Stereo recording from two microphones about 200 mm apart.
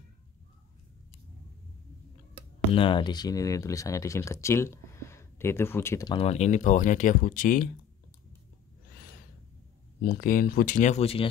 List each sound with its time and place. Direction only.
2.7 s speech: 25° left (ahead or behind)
6.1 s speech: 30° left (ahead or behind)
10.0 s speech: 45° left (ahead or behind)